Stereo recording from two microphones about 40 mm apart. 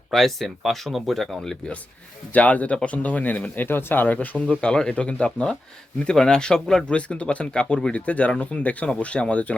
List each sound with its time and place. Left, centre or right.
0.1 s speech: centre
2.3 s speech: left
4.0 s speech: left
6.1 s speech: centre
6.9 s speech: left